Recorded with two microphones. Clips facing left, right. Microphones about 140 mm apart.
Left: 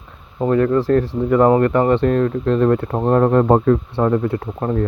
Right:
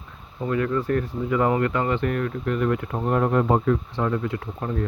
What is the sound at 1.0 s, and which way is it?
Speech, 60° left (ahead or behind).